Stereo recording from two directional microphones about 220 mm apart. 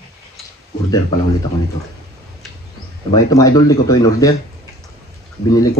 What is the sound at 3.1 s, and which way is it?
Speech, 15° left (ahead or behind).